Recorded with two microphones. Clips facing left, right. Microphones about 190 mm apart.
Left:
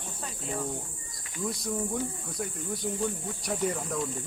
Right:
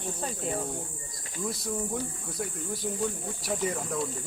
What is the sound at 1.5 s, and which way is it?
Speech, centre (ahead or behind).